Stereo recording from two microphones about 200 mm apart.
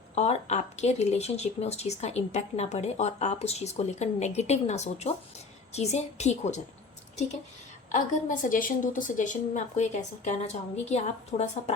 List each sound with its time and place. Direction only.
0.1 s speech: 35° left (ahead or behind)
7.9 s speech: 40° left (ahead or behind)